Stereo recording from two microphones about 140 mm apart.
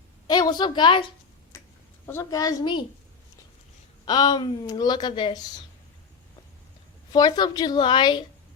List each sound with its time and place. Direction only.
0.3 s a woman's voice: 30° left (ahead or behind)
2.0 s a child's voice: 20° left (ahead or behind)
4.0 s a woman's voice: 30° left (ahead or behind)
7.1 s a woman's voice: 30° left (ahead or behind)